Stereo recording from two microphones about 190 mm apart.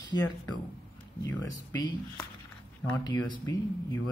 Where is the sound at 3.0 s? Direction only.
20° left (ahead or behind).